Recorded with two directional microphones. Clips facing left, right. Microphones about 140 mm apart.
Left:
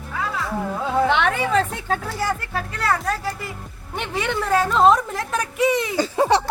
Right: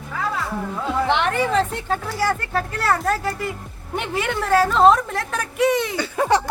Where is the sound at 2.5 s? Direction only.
Centre (ahead or behind).